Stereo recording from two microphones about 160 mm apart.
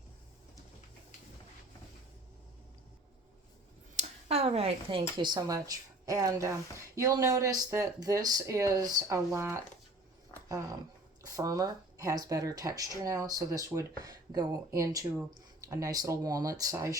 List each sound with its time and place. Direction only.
3.9 s speech: 40° right (ahead or behind); by 9.6 s 15° right (ahead or behind)
11.2 s speech: 25° right (ahead or behind)